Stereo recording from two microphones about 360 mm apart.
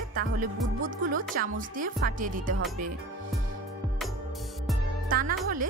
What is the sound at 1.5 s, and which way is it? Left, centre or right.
Speech, right.